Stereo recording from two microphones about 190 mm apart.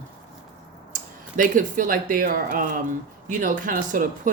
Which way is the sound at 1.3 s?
45° right (ahead or behind).